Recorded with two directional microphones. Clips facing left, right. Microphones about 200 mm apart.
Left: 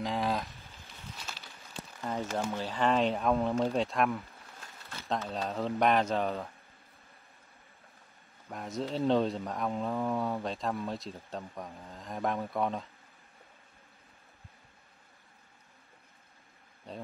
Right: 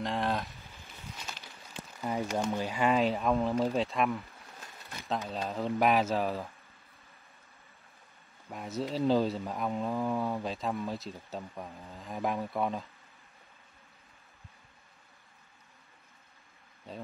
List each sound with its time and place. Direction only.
0.0 s speech: centre (ahead or behind)
2.0 s speech: 10° right (ahead or behind)
5.3 s speech: 5° right (ahead or behind)
8.5 s speech: 5° right (ahead or behind)